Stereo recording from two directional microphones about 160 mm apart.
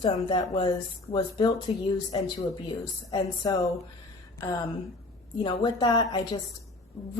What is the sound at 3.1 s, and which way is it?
Speech, 20° left (ahead or behind).